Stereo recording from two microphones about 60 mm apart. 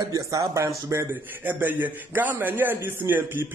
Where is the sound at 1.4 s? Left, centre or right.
Right.